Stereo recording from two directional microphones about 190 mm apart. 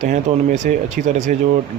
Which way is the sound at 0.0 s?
40° right (ahead or behind).